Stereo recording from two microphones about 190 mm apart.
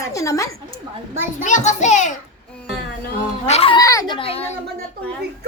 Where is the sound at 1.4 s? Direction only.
40° left (ahead or behind).